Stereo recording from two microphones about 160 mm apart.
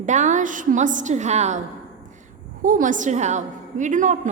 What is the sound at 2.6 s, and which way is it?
A woman's voice, 55° right (ahead or behind).